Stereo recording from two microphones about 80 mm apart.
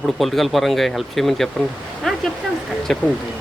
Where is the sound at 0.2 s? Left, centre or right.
Centre.